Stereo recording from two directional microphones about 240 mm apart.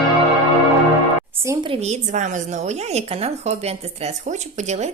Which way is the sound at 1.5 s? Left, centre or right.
Right.